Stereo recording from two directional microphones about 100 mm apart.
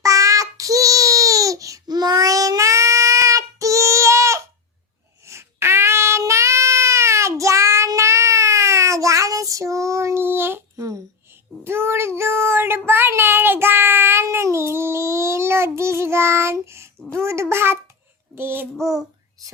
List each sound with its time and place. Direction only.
0.0 s child singing: 35° right (ahead or behind)